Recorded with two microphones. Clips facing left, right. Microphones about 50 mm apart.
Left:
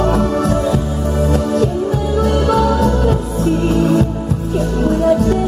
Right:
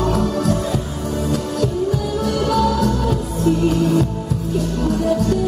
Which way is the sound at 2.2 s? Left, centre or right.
Left.